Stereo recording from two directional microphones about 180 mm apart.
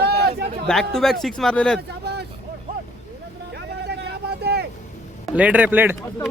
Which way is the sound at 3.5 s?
65° right (ahead or behind).